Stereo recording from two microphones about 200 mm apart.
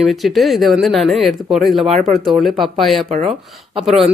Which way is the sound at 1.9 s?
35° right (ahead or behind).